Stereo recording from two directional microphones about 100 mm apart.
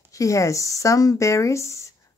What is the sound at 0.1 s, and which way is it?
A woman's voice, 35° left (ahead or behind).